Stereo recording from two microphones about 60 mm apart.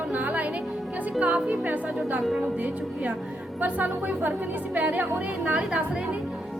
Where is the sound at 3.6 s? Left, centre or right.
Right.